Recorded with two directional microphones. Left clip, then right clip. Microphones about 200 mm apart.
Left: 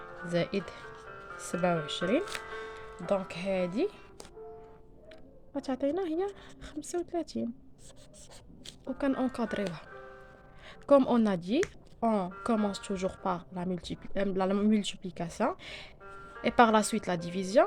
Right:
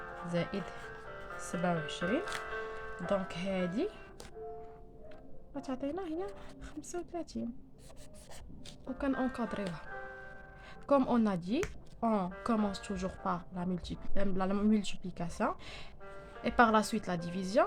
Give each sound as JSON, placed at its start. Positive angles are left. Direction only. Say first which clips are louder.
{"t": 0.3, "sound": "speech", "louder": "left 6 dB", "side_deg": 30}
{"t": 5.5, "sound": "speech", "louder": "left 7 dB", "side_deg": 35}
{"t": 9.0, "sound": "speech", "louder": "left 3 dB", "side_deg": 25}